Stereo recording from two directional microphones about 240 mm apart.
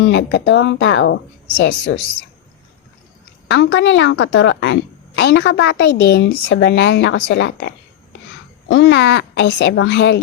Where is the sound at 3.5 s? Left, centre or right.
Left.